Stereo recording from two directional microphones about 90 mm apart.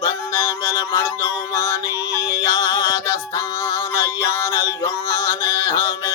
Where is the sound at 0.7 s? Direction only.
45° left (ahead or behind).